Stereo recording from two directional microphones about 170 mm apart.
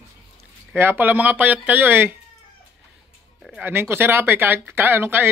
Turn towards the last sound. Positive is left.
turn(degrees=-10)  # may be behind; listen again after turning